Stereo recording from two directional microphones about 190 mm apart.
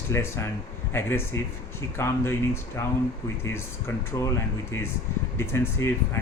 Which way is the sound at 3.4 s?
10° left (ahead or behind).